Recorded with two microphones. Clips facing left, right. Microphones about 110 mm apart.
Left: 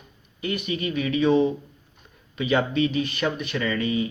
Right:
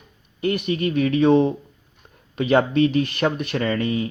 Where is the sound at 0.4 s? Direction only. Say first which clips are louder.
Right 5 dB; 55° right (ahead or behind).